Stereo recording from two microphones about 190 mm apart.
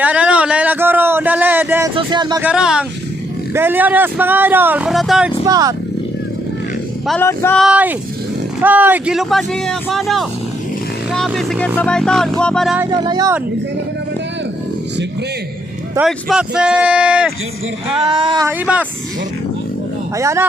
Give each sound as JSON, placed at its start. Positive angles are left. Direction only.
{"t": 0.0, "sound": "a sound", "side_deg": -5}
{"t": 2.0, "sound": "a sound", "side_deg": -25}
{"t": 2.4, "sound": "speech", "side_deg": -5}
{"t": 5.5, "sound": "speech", "side_deg": -20}
{"t": 7.1, "sound": "male singing", "side_deg": 10}
{"t": 7.6, "sound": "speech", "side_deg": -5}
{"t": 12.9, "sound": "speech", "side_deg": -20}
{"t": 16.0, "sound": "speech", "side_deg": -5}
{"t": 17.8, "sound": "speech", "side_deg": -30}
{"t": 18.4, "sound": "speech", "side_deg": -5}
{"t": 20.1, "sound": "speech", "side_deg": -15}